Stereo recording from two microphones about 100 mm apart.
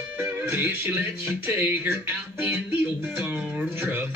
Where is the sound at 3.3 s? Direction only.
20° right (ahead or behind).